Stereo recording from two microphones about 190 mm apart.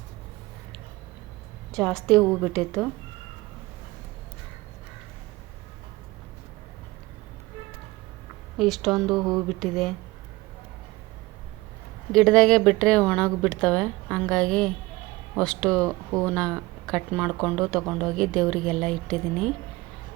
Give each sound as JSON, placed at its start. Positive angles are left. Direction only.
{"t": 1.7, "sound": "speech", "side_deg": 0}
{"t": 8.5, "sound": "speech", "side_deg": 0}
{"t": 12.1, "sound": "speech", "side_deg": 5}
{"t": 15.9, "sound": "speech", "side_deg": -15}
{"t": 16.3, "sound": "speech", "side_deg": 5}